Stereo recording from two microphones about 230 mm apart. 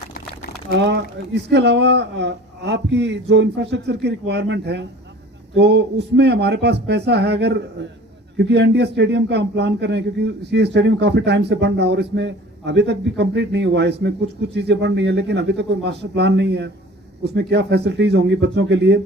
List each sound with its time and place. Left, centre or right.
0.7 s a man's voice: right